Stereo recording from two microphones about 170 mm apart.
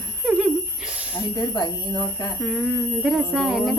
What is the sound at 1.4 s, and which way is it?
Speech, 20° left (ahead or behind).